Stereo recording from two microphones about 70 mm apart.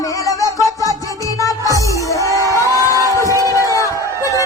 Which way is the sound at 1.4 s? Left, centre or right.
Left.